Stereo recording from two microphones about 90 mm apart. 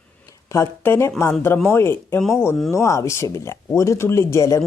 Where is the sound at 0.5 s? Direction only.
30° left (ahead or behind).